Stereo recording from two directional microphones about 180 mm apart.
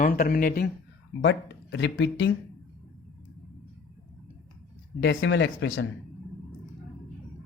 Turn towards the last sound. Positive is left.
turn(degrees=90)